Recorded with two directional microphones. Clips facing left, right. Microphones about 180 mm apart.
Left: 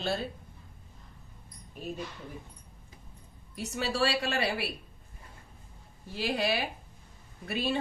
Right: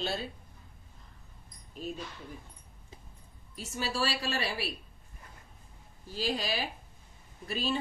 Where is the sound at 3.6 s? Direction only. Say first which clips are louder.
Left 3 dB; 70° left (ahead or behind).